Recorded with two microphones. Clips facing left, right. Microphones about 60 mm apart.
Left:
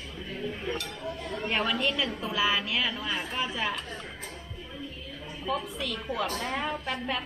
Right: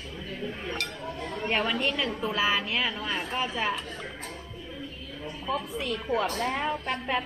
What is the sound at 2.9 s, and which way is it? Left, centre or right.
Speech, centre.